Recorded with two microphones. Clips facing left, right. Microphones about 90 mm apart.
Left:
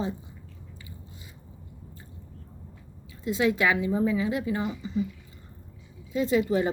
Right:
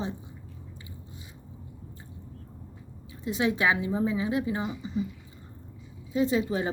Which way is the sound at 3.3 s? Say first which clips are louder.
Left 2 dB; 10° right (ahead or behind).